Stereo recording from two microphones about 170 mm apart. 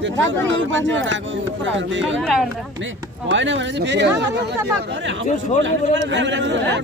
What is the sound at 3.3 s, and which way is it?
Speech, 90° right.